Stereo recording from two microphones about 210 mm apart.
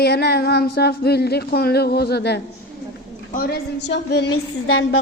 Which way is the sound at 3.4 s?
50° left (ahead or behind).